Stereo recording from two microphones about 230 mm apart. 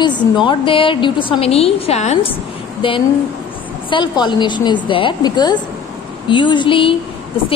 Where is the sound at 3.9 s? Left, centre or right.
Centre.